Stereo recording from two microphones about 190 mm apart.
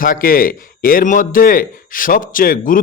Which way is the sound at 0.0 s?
45° left (ahead or behind).